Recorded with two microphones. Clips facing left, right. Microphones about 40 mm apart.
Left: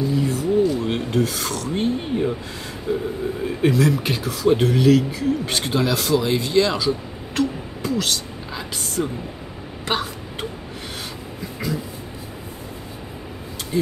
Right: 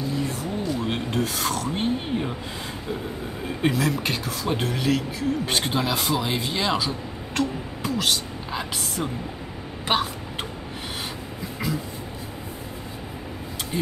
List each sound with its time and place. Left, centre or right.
0.3 s filing: centre
2.9 s speech: centre